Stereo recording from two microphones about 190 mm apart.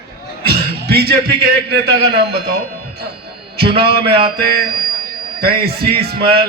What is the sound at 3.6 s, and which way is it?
A man's voice, 55° right (ahead or behind).